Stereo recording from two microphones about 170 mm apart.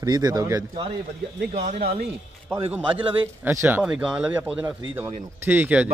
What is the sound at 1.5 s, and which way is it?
Speech, 50° right (ahead or behind).